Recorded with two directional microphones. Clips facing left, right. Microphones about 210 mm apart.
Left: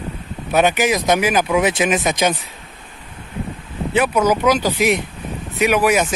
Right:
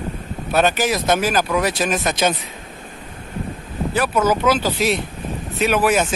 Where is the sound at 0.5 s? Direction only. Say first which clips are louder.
Left 2 dB; 15° left (ahead or behind).